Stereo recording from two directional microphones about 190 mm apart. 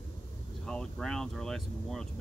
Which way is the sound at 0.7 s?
5° left (ahead or behind).